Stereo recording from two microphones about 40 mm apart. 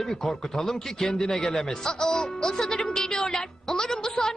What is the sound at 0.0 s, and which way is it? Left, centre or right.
A woman's voice, centre.